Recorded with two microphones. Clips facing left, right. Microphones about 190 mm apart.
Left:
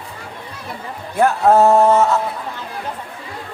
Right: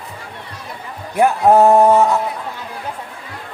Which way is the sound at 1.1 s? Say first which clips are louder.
Right 1 dB; 15° right (ahead or behind).